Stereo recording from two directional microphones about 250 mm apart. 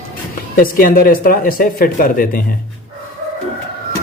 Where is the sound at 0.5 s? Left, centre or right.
Left.